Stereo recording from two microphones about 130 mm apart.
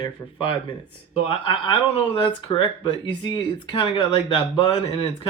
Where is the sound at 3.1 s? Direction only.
35° left (ahead or behind).